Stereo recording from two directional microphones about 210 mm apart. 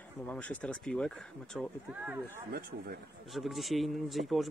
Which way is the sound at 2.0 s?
10° right (ahead or behind).